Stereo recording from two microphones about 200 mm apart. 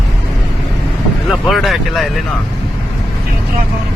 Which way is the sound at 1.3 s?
Centre (ahead or behind).